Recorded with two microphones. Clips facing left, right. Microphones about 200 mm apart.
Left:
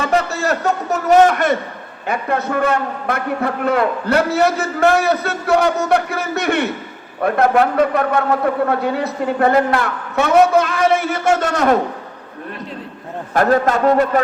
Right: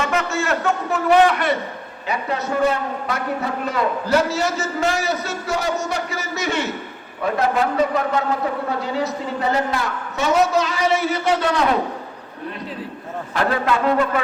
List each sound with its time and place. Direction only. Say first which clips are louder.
0.0 s a man's voice: left 4 dB; 35° left (ahead or behind)
13.3 s a man's voice: left 6 dB; 45° left (ahead or behind)